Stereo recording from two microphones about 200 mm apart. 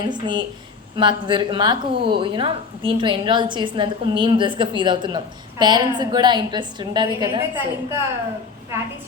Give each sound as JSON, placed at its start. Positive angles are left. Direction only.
{"t": 0.0, "sound": "a woman's voice", "side_deg": -20}